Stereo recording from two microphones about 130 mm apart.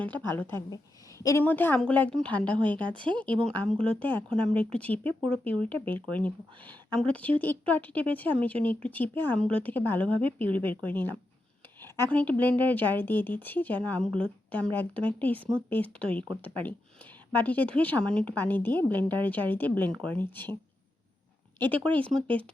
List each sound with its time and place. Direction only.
0.0 s a woman's voice: 15° left (ahead or behind)
1.5 s a woman's voice: 15° left (ahead or behind)
21.6 s a woman's voice: 10° left (ahead or behind)